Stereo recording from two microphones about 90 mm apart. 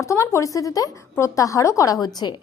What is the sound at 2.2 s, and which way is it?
Speech, 60° left (ahead or behind).